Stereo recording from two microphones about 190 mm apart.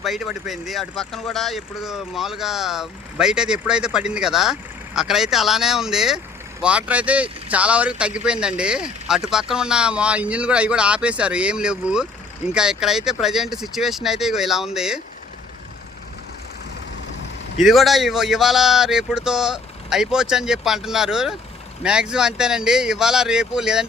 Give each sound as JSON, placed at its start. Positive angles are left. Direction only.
{"t": 0.0, "sound": "speech", "side_deg": 0}
{"t": 17.6, "sound": "speech", "side_deg": 0}